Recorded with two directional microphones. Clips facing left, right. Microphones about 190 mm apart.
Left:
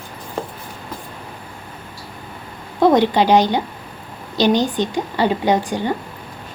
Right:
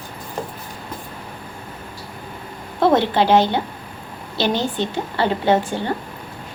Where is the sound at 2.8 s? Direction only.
15° left (ahead or behind).